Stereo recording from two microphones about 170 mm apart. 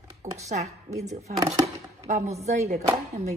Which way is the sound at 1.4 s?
40° right (ahead or behind).